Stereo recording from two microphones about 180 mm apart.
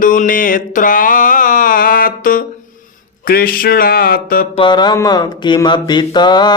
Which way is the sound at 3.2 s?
55° left (ahead or behind).